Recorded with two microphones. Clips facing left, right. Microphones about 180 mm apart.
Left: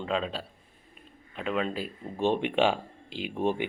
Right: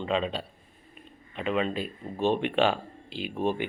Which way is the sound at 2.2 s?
15° left (ahead or behind).